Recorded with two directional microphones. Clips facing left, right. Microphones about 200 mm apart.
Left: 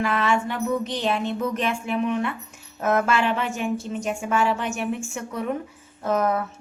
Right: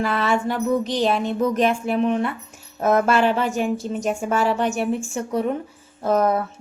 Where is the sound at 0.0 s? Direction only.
35° right (ahead or behind).